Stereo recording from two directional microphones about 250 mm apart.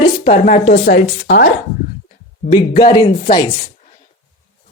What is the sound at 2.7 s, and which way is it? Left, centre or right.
Speech, centre.